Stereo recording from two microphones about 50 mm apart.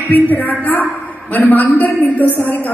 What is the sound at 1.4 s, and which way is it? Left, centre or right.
A woman's voice, left.